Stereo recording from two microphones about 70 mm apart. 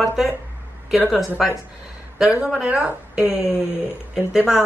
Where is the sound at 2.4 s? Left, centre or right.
Centre.